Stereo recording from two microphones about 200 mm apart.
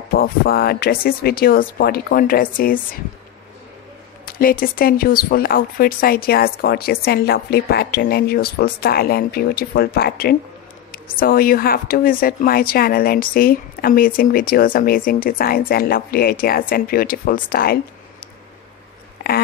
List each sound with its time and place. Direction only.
0.1 s speech: 45° left (ahead or behind)
4.3 s speech: 45° left (ahead or behind)